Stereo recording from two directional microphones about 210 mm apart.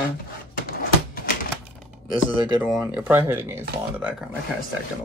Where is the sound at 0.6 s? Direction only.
40° left (ahead or behind).